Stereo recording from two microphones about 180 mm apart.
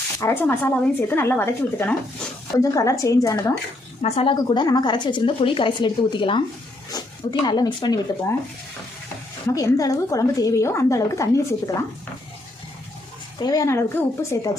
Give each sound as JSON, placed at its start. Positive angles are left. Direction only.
{"t": 0.2, "sound": "a woman's voice", "side_deg": 10}
{"t": 4.0, "sound": "speech", "side_deg": 35}
{"t": 9.5, "sound": "a woman's voice", "side_deg": 20}
{"t": 13.4, "sound": "speech", "side_deg": 20}